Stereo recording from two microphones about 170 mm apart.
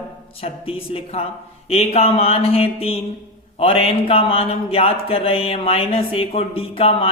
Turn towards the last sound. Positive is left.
turn(degrees=35)  # may be behind; listen again after turning